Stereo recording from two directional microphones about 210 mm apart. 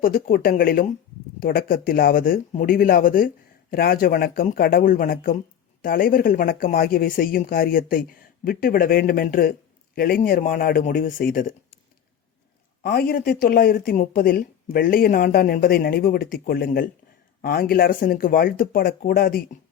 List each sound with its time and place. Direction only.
0.0 s speech: 45° left (ahead or behind)
12.8 s speech: 45° left (ahead or behind)